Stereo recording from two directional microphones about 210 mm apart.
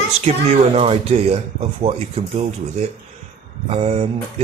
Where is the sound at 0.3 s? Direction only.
35° right (ahead or behind).